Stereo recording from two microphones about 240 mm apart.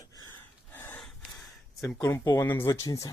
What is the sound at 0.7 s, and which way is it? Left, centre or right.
Gasp, centre.